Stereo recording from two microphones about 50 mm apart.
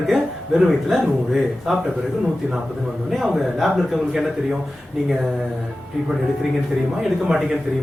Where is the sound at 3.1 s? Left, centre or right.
Centre.